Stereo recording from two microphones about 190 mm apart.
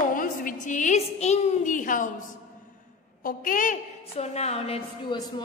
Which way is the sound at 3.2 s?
45° left (ahead or behind).